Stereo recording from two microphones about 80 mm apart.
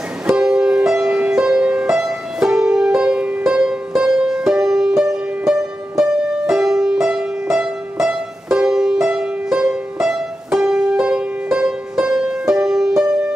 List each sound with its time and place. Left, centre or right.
0.3 s music: centre